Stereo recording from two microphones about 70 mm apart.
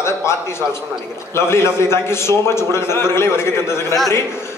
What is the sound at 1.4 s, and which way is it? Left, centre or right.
A man's voice, left.